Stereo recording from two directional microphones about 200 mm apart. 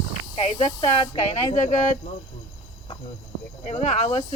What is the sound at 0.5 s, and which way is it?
Speech, 25° left (ahead or behind).